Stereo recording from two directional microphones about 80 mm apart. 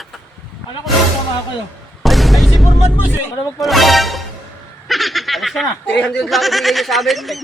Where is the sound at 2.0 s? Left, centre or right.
Centre.